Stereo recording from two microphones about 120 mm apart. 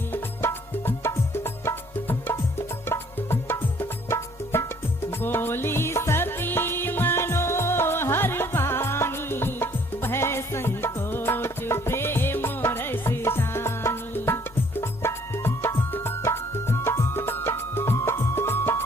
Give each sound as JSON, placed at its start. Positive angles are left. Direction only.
{"t": 0.1, "sound": "music", "side_deg": 20}